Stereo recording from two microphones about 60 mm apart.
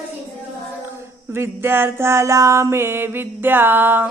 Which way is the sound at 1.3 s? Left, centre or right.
Right.